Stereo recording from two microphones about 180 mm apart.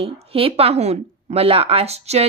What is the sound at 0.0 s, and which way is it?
A woman's voice, 35° right (ahead or behind).